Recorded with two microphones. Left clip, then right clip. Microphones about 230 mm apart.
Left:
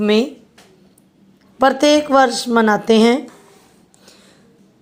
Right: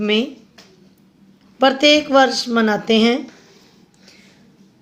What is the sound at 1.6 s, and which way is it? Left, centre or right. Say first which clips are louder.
Speech: even; left.